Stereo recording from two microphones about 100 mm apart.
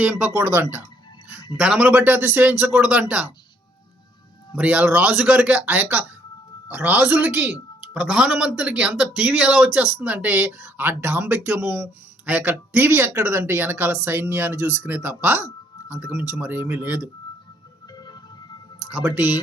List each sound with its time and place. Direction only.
0.0 s speech: 15° right (ahead or behind)
1.5 s a man's voice: 10° right (ahead or behind)
4.5 s a man's voice: 15° right (ahead or behind)
17.9 s music: 45° left (ahead or behind)
19.0 s speech: 20° right (ahead or behind)